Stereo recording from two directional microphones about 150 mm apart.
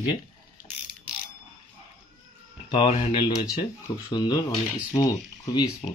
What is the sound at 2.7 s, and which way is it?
Speech, 35° left (ahead or behind).